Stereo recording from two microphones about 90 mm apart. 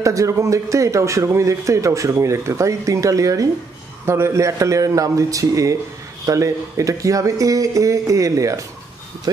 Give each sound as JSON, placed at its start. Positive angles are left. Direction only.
{"t": 0.0, "sound": "speech", "side_deg": -35}